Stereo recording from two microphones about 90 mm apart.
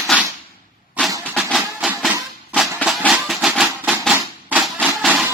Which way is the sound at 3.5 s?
10° right (ahead or behind).